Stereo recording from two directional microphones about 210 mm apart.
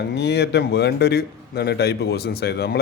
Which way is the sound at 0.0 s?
55° left (ahead or behind).